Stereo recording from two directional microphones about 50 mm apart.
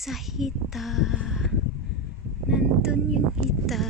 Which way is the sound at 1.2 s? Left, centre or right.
Centre.